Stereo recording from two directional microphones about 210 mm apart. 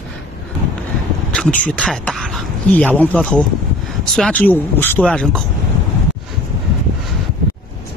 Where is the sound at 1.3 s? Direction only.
5° left (ahead or behind).